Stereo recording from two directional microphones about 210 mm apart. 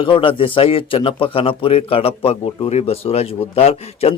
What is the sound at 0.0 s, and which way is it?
Speech, 25° left (ahead or behind).